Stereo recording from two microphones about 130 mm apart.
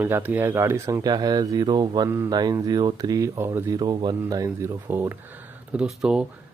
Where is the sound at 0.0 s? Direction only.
15° right (ahead or behind).